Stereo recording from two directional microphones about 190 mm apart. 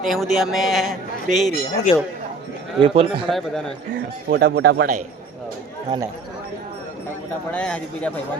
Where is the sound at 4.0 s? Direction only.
60° right (ahead or behind).